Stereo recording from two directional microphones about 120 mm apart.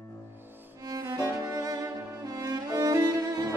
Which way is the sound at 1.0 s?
25° right (ahead or behind).